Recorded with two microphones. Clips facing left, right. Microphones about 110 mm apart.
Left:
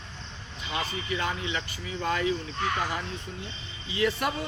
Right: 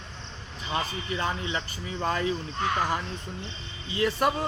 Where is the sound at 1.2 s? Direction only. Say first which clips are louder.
Right 2 dB; 35° right (ahead or behind).